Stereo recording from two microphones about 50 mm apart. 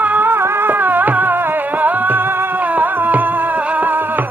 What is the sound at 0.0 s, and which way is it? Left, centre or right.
Music, right.